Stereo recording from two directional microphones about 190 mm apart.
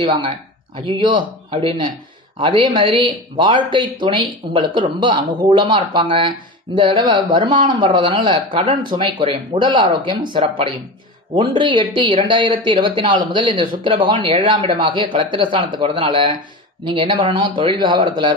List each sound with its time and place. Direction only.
0.0 s speech: 25° right (ahead or behind)